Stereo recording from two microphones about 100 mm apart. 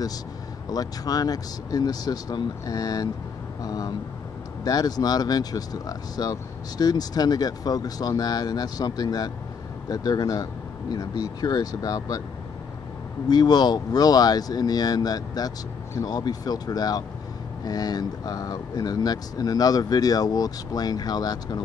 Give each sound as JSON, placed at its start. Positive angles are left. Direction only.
{"t": 0.7, "sound": "speech", "side_deg": 40}
{"t": 13.3, "sound": "speech", "side_deg": 45}